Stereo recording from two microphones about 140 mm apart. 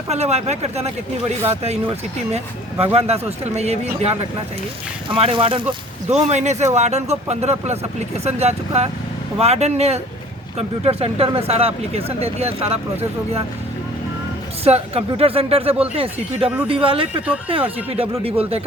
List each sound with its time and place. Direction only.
0.1 s speech: 50° right (ahead or behind)
5.1 s speech: 40° right (ahead or behind)
6.1 s speech: 50° right (ahead or behind)
14.6 s speech: 45° right (ahead or behind)